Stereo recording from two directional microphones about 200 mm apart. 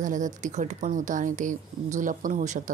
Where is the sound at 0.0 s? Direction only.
40° right (ahead or behind).